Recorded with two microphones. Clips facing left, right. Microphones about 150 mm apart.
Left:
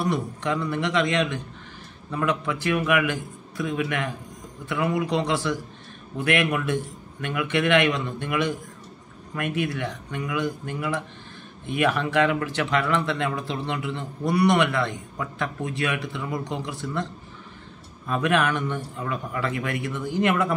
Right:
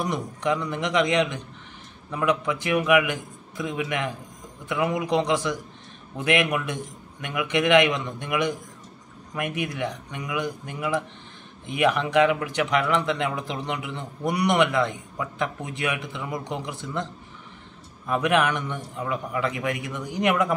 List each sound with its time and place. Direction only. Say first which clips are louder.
0.0 s speech: left 1 dB; 20° right (ahead or behind)